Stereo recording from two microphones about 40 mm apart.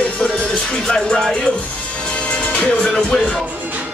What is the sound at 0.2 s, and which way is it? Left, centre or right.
Music, left.